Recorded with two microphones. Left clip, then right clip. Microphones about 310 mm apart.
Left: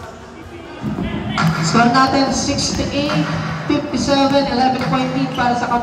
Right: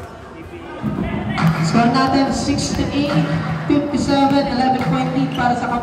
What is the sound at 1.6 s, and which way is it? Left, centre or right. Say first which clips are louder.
A woman's voice: left 4 dB; centre.